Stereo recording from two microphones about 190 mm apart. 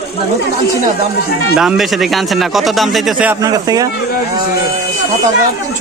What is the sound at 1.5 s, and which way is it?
A man's voice, centre (ahead or behind).